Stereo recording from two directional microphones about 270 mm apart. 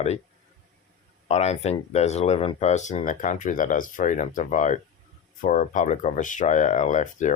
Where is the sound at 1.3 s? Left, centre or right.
Left.